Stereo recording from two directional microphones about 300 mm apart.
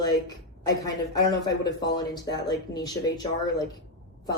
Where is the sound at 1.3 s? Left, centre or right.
Centre.